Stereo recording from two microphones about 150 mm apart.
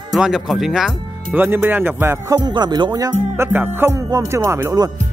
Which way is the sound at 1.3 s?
15° right (ahead or behind).